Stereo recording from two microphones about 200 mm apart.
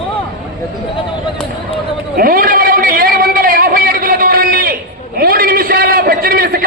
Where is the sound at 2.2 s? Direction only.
45° right (ahead or behind).